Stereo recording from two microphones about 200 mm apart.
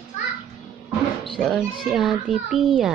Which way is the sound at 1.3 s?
5° left (ahead or behind).